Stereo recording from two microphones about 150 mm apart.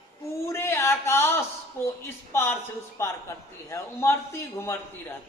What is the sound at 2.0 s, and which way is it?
A man's voice, 15° left (ahead or behind).